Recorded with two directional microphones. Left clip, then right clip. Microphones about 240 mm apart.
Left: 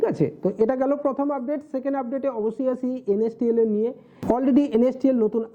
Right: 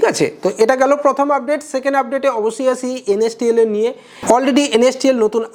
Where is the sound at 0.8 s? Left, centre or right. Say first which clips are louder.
Right 10 dB; centre.